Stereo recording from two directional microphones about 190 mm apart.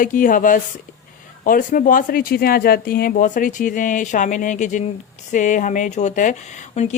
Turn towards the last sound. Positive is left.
turn(degrees=40)  # may be behind; listen again after turning